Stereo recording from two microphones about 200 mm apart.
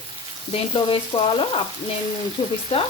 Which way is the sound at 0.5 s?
25° left (ahead or behind).